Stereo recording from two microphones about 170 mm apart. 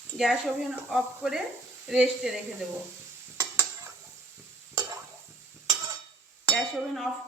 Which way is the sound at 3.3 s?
15° right (ahead or behind).